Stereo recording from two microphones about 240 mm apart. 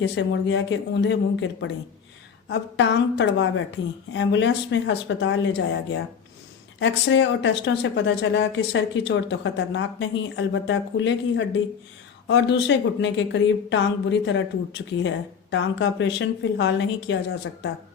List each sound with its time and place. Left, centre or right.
0.0 s speech: left